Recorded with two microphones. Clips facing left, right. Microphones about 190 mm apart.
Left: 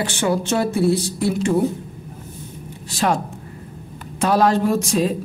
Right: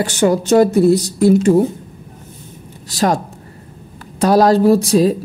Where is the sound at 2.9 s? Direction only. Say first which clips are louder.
Right 4 dB; 40° right (ahead or behind).